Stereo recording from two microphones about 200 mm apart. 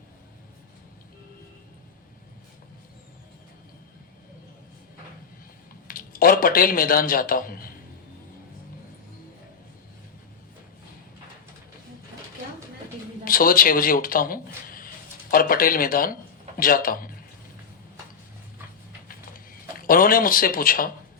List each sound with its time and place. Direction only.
5.9 s a man's voice: 45° left (ahead or behind)
13.2 s speech: 45° left (ahead or behind)
19.0 s a sound: 45° left (ahead or behind)